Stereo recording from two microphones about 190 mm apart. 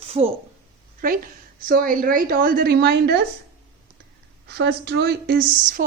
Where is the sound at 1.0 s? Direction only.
45° right (ahead or behind).